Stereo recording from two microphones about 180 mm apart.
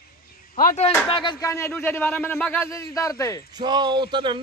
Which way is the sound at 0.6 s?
55° left (ahead or behind).